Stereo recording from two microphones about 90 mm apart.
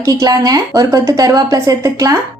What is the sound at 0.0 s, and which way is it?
A woman's voice, 45° right (ahead or behind).